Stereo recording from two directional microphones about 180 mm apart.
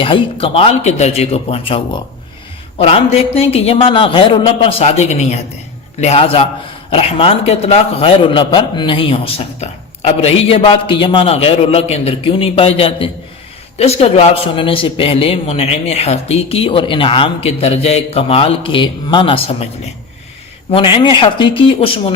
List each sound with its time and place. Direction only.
0.0 s a man's voice: 30° left (ahead or behind)
20.7 s speech: 30° left (ahead or behind)